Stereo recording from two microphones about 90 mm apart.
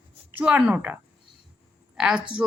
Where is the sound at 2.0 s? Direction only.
10° right (ahead or behind).